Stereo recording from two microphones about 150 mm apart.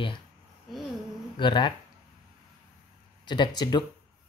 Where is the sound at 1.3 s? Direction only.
30° left (ahead or behind).